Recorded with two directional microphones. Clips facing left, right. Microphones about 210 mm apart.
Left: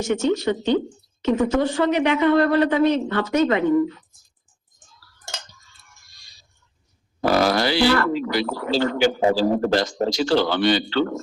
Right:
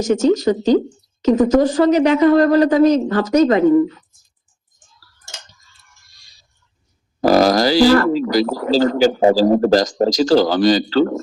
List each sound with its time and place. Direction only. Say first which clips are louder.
0.0 s speech: right 6 dB; 40° right (ahead or behind)
7.2 s speech: right 6 dB; 40° right (ahead or behind)